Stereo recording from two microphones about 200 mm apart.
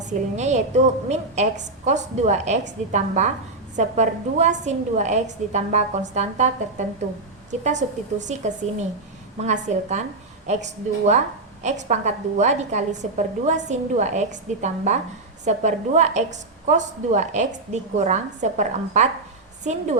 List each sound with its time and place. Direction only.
0.0 s a woman's voice: 35° right (ahead or behind)